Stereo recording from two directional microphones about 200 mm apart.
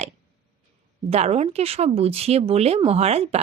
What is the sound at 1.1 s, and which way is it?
Speech, 30° right (ahead or behind).